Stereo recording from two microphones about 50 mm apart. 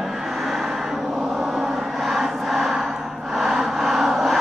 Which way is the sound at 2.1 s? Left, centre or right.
Centre.